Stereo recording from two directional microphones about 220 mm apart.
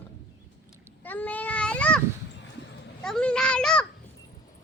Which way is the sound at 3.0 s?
5° left (ahead or behind).